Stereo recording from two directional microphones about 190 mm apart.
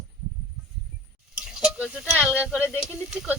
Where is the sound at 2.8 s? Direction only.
5° right (ahead or behind).